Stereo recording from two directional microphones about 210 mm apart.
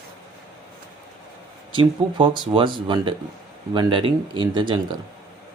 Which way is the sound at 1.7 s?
25° right (ahead or behind).